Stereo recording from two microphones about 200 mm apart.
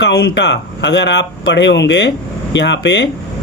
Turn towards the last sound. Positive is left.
turn(degrees=60)  # may be behind; listen again after turning